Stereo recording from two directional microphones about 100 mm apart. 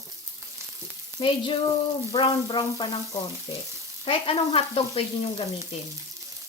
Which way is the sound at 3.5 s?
75° left (ahead or behind).